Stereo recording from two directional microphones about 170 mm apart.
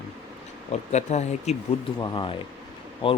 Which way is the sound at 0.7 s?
40° left (ahead or behind).